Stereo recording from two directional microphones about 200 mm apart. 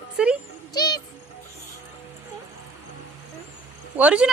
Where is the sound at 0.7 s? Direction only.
20° left (ahead or behind).